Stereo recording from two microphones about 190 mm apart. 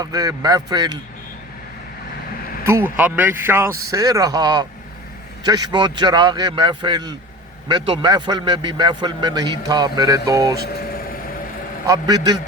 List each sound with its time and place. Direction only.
0.0 s a man's voice: 20° right (ahead or behind)
2.6 s a man's voice: 10° right (ahead or behind)
10.7 s vehicle: 55° left (ahead or behind)
11.9 s a man's voice: 20° right (ahead or behind)